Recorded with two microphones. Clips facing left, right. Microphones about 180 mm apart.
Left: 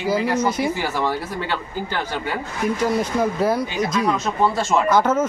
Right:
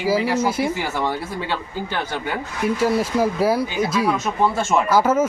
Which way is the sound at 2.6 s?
5° right (ahead or behind).